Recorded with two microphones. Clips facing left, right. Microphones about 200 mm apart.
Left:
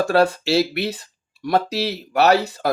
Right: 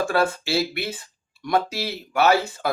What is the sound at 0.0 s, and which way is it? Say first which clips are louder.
Speech: left 5 dB; 40° left (ahead or behind).